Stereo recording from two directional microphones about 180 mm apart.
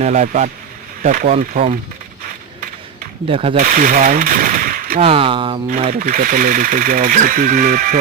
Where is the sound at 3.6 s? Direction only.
45° right (ahead or behind).